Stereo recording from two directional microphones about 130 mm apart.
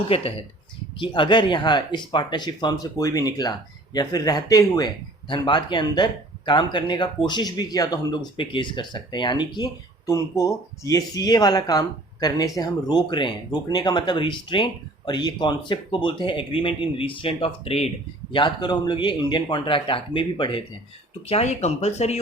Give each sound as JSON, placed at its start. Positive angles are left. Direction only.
{"t": 0.1, "sound": "speech", "side_deg": 45}
{"t": 10.1, "sound": "speech", "side_deg": 25}
{"t": 18.3, "sound": "speech", "side_deg": 35}
{"t": 21.2, "sound": "speech", "side_deg": 55}